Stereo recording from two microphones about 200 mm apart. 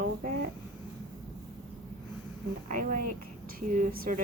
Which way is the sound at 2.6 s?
40° right (ahead or behind).